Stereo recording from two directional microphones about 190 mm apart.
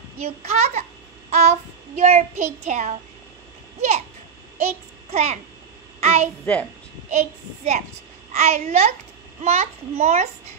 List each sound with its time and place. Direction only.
0.2 s child singing: 35° right (ahead or behind)
4.6 s a child's voice: 35° right (ahead or behind)
5.9 s a sound: 35° right (ahead or behind)
6.4 s a woman's voice: 5° left (ahead or behind)
7.1 s child singing: 35° right (ahead or behind)